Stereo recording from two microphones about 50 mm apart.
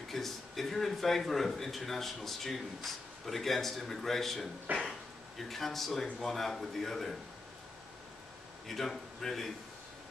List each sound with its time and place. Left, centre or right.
0.1 s a man's voice: centre
4.7 s a sound: right
5.4 s a man's voice: centre
8.6 s a man's voice: centre